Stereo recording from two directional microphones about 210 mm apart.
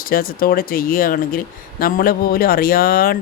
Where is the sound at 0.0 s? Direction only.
45° left (ahead or behind).